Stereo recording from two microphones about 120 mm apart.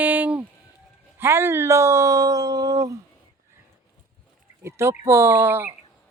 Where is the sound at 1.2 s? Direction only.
20° right (ahead or behind).